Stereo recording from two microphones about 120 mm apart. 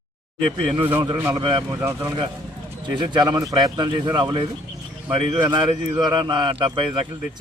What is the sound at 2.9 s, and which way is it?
A man's voice, 40° right (ahead or behind).